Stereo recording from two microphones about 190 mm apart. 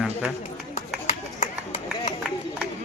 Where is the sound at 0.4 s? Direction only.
35° left (ahead or behind).